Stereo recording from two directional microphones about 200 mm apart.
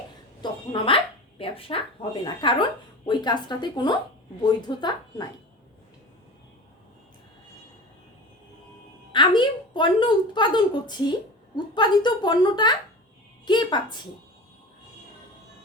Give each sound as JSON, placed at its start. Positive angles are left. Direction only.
{"t": 0.4, "sound": "a woman's voice", "side_deg": 25}
{"t": 9.1, "sound": "a woman's voice", "side_deg": 25}